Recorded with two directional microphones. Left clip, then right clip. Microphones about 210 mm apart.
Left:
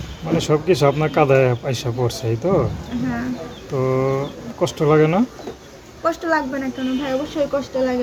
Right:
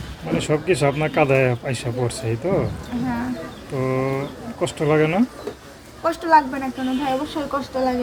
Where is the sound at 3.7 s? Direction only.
20° left (ahead or behind).